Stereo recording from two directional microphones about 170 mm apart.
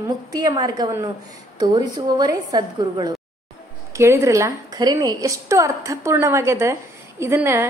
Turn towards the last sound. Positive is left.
turn(degrees=-15)  # may be behind; listen again after turning